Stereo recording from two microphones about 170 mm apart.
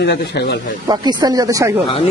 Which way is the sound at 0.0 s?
75° left (ahead or behind).